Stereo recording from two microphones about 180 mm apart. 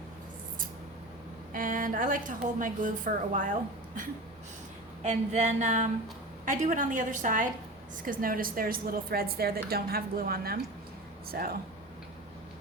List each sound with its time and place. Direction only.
1.5 s a woman's voice: 50° right (ahead or behind)
5.0 s a sound: 40° right (ahead or behind)
6.4 s a woman's voice: 45° right (ahead or behind)